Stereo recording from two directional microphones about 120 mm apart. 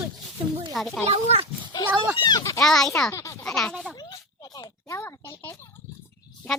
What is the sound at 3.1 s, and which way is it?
Speech, 25° left (ahead or behind).